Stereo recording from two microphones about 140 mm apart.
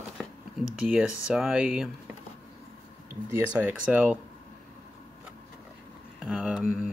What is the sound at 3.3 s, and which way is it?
Speech, 15° right (ahead or behind).